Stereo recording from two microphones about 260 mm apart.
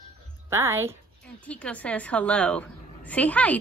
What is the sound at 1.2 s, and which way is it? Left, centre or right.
A woman's voice, centre.